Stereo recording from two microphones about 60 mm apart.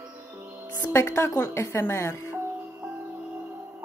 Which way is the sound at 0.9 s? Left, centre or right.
Left.